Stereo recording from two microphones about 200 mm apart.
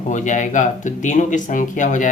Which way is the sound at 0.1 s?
40° left (ahead or behind).